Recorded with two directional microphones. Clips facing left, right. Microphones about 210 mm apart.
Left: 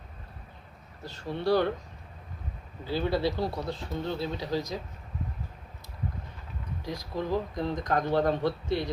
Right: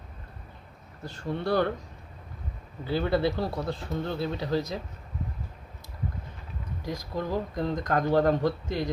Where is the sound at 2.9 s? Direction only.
55° right (ahead or behind).